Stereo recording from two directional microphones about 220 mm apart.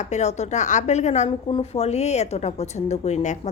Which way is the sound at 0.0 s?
30° left (ahead or behind).